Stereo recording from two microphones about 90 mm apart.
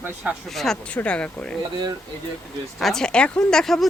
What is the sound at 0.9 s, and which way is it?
Speech, 15° left (ahead or behind).